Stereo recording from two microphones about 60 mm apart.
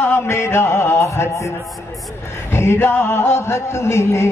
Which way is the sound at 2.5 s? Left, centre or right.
Left.